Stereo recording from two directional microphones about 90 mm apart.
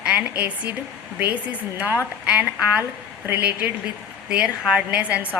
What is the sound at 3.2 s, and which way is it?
Speech, 20° right (ahead or behind).